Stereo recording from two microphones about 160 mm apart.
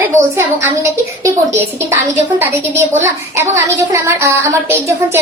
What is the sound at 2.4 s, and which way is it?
A woman's voice, 15° right (ahead or behind).